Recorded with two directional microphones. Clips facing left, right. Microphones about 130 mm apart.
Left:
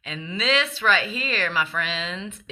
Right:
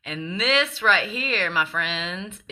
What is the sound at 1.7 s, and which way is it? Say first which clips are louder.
Speech: even; 10° right (ahead or behind).